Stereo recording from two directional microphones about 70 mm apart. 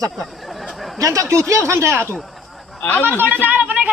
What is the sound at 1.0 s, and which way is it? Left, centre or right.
A man's voice, right.